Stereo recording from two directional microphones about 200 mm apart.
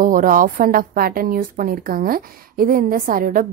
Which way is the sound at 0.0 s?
40° right (ahead or behind).